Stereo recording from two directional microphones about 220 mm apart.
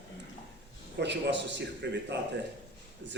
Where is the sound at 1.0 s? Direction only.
55° right (ahead or behind).